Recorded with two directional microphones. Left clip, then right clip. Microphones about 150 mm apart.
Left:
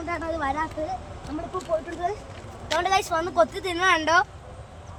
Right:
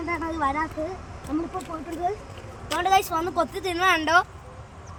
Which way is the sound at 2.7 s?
20° left (ahead or behind).